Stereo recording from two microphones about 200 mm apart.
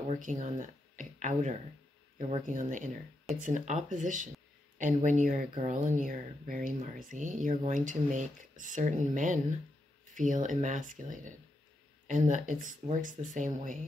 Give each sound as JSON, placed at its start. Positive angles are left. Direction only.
{"t": 0.1, "sound": "speech", "side_deg": -40}